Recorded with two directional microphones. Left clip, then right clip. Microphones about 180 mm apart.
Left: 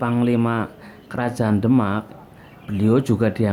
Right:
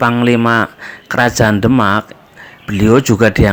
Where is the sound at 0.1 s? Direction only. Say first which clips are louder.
Right 9 dB; 25° right (ahead or behind).